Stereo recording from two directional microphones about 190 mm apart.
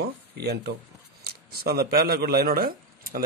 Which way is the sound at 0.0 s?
55° right (ahead or behind).